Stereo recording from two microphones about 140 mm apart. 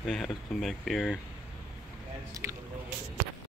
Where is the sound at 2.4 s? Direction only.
15° right (ahead or behind).